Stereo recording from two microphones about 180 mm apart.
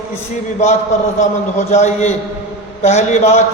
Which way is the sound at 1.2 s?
40° left (ahead or behind).